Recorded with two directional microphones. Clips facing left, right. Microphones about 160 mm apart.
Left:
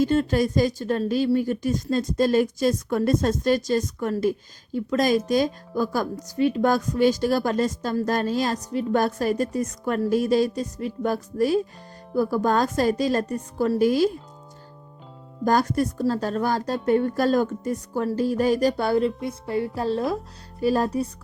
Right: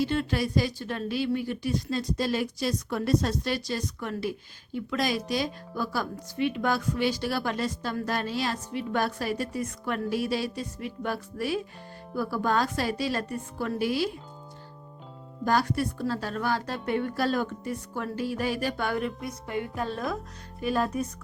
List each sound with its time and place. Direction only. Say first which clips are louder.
0.0 s speech: left 6 dB; 45° left (ahead or behind)
15.4 s a woman's voice: left 5 dB; 45° left (ahead or behind)